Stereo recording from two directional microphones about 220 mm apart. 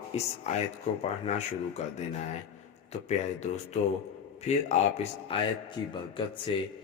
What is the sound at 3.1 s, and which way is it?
Speech, 30° left (ahead or behind).